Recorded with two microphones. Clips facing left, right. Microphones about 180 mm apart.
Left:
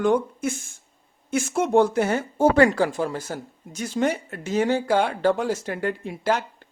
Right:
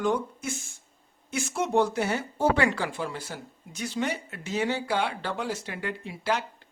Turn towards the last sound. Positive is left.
turn(degrees=50)  # may be behind; listen again after turning